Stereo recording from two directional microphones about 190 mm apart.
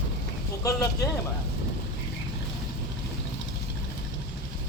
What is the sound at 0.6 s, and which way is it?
Speech, 15° left (ahead or behind).